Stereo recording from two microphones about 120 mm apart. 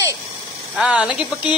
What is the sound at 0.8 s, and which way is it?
Speech, 10° right (ahead or behind).